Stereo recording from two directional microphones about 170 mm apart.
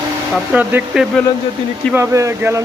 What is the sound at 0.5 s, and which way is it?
Speech, 10° right (ahead or behind).